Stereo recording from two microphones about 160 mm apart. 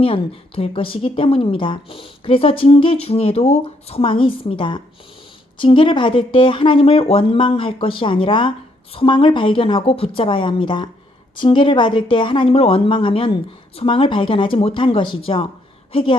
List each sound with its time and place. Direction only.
0.0 s a woman's voice: 35° left (ahead or behind)